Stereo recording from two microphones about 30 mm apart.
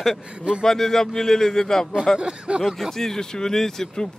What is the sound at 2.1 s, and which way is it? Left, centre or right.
Speech, right.